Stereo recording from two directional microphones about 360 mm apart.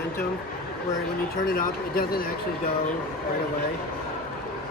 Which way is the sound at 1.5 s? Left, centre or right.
Left.